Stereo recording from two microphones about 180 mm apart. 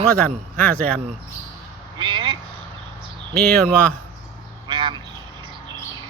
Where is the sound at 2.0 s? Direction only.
25° right (ahead or behind).